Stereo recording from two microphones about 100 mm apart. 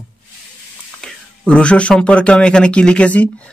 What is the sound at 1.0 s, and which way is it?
Speech, 10° left (ahead or behind).